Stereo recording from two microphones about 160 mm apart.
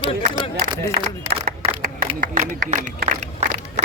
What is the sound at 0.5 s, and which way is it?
Speech, 45° right (ahead or behind).